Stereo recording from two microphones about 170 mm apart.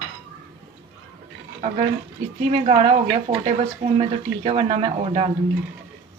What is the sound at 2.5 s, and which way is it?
Speech, 40° right (ahead or behind).